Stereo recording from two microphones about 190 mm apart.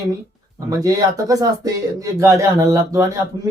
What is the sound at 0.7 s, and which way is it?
Speech, 20° right (ahead or behind).